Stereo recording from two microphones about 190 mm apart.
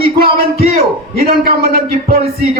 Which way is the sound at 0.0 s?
55° left (ahead or behind).